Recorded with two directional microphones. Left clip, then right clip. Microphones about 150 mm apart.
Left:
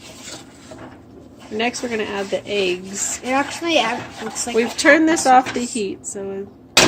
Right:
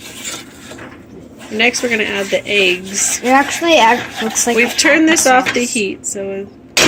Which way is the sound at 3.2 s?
70° right (ahead or behind).